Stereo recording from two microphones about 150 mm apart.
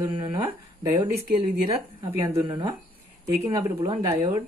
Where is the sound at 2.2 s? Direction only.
25° right (ahead or behind).